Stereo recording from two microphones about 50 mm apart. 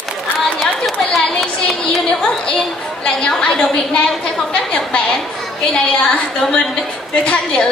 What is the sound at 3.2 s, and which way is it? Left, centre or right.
Speech, centre.